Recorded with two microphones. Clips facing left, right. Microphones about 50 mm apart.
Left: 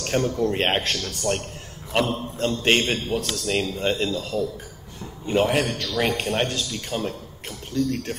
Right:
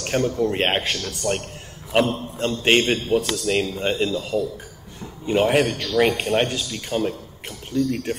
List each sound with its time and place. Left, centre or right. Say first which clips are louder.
0.0 s a sound: right 1 dB; centre
0.4 s a man's voice: right 1 dB; centre
1.2 s a man's voice: right 1 dB; centre